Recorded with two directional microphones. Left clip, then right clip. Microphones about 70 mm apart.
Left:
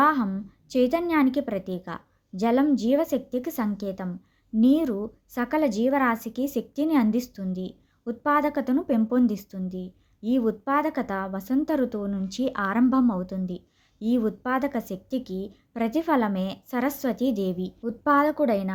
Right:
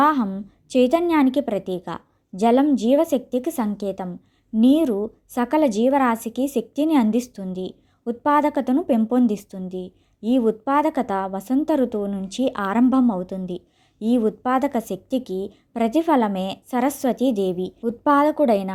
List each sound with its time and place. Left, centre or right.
0.0 s a woman's voice: right
14.4 s a woman's voice: right